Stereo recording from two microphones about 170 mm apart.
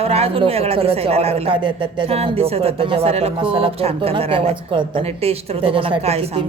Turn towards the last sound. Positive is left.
turn(degrees=-35)  # may be behind; listen again after turning